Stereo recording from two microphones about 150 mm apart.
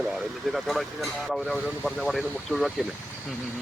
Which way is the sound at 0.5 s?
Centre (ahead or behind).